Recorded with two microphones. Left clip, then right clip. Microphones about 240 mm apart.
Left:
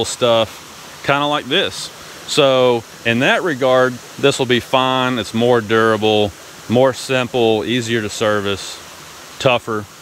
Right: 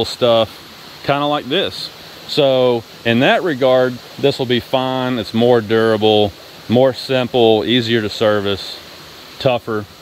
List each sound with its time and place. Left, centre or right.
0.2 s speech: centre
1.7 s a sound: left
2.3 s speech: centre